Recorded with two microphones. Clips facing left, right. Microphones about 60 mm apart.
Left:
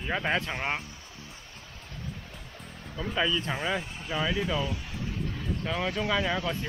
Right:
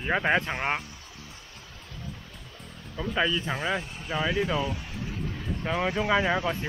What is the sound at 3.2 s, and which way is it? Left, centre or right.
Speech, centre.